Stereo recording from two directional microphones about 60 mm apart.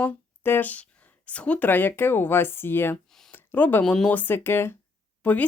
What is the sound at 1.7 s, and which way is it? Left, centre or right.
Speech, left.